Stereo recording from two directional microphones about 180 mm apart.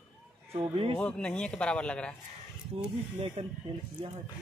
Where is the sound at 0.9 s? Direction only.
5° left (ahead or behind).